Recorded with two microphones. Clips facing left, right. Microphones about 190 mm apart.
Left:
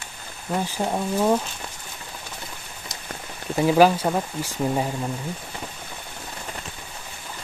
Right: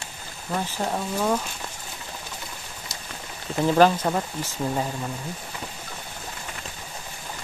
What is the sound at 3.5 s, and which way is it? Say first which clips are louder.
Speech: left 2 dB; 10° left (ahead or behind).